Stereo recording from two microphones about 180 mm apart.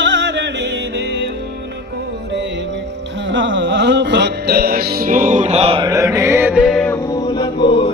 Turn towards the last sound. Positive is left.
turn(degrees=30)  # may be behind; listen again after turning